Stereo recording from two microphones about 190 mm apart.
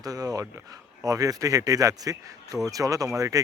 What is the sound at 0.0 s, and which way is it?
Speech, 20° right (ahead or behind).